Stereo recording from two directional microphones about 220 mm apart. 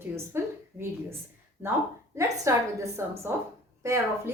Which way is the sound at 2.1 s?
15° right (ahead or behind).